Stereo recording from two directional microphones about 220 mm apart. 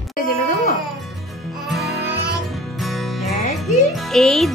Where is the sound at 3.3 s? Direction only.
30° left (ahead or behind).